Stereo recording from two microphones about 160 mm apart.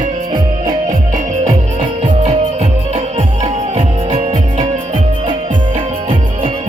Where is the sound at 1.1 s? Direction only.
45° right (ahead or behind).